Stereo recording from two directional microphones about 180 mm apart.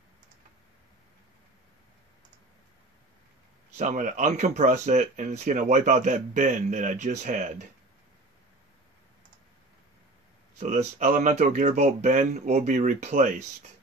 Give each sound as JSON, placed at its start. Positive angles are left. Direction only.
{"t": 3.7, "sound": "speech", "side_deg": -45}
{"t": 10.6, "sound": "speech", "side_deg": -40}